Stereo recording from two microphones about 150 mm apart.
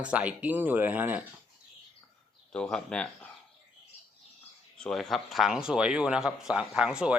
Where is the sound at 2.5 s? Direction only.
5° left (ahead or behind).